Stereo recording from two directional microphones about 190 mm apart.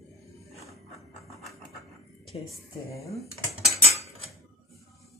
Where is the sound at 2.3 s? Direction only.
30° left (ahead or behind).